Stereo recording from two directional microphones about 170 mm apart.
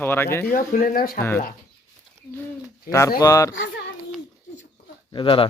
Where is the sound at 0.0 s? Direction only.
15° left (ahead or behind).